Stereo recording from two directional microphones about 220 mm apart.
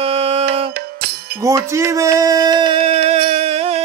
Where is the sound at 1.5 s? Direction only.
15° right (ahead or behind).